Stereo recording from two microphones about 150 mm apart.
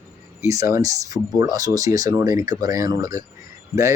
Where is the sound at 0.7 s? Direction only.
20° right (ahead or behind).